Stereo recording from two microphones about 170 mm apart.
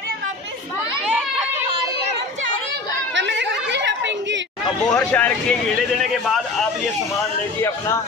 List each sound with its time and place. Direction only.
3.2 s chatter: 90° right
4.9 s speech: 5° left (ahead or behind)